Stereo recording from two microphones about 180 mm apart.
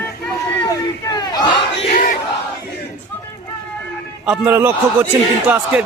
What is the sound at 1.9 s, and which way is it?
Crowd, 55° left (ahead or behind).